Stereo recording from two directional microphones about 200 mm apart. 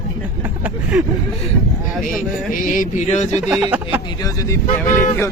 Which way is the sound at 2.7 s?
40° left (ahead or behind).